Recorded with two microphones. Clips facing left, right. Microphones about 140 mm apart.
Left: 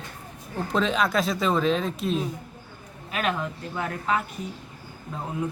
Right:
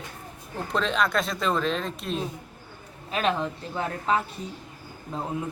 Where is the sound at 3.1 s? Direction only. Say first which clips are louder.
Right 2 dB; 30° right (ahead or behind).